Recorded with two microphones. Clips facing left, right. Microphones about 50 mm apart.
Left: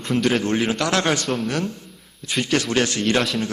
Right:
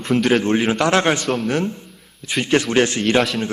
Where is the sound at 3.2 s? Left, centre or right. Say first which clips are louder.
Right 3 dB; centre.